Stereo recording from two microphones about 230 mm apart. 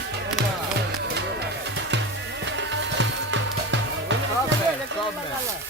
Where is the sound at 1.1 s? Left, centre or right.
Right.